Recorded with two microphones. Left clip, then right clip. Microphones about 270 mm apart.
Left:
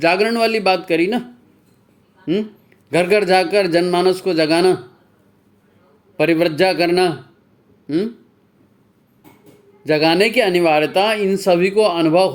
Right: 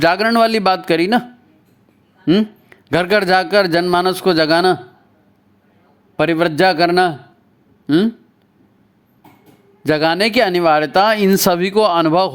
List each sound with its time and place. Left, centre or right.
0.0 s speech: right
2.6 s speech: right
6.1 s speech: right
9.8 s speech: right